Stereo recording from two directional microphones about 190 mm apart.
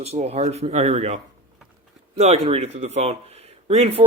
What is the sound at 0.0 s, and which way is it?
Speech, 35° right (ahead or behind).